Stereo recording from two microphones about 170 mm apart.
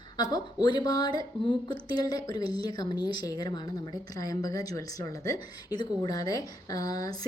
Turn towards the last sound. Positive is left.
turn(degrees=20)  # may be behind; listen again after turning